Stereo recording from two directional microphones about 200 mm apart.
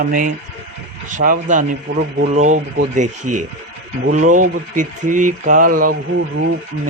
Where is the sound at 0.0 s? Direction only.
45° right (ahead or behind).